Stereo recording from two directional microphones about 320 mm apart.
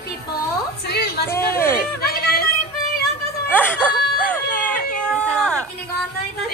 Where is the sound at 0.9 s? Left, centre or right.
Left.